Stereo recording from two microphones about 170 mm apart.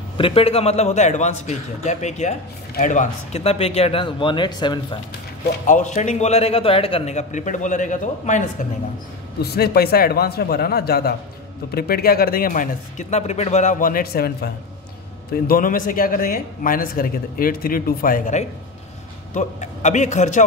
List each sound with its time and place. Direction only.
0.2 s a man's voice: 35° left (ahead or behind)
5.7 s a man's voice: 45° left (ahead or behind)
9.4 s a man's voice: 70° left (ahead or behind); by 20.4 s 45° left (ahead or behind)